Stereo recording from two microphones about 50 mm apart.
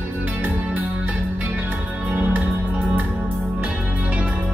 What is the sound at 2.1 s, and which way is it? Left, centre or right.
Music, right.